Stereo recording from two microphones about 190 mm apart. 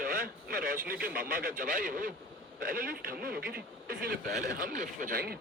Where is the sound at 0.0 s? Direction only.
50° right (ahead or behind).